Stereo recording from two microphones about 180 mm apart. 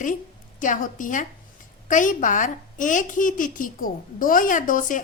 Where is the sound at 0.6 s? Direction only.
45° left (ahead or behind).